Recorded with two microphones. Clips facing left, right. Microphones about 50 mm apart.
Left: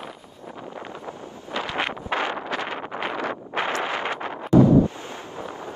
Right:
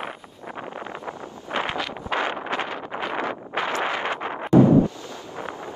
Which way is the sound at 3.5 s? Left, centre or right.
Left.